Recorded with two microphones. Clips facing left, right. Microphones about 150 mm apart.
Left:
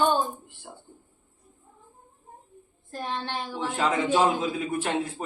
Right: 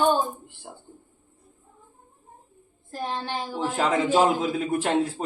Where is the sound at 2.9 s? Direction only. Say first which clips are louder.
Right 2 dB; 15° right (ahead or behind).